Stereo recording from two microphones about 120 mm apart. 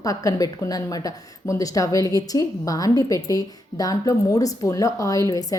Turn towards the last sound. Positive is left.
turn(degrees=25)  # may be behind; listen again after turning